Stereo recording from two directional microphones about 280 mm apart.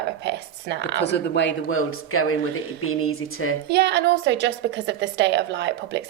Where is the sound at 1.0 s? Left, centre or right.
Left.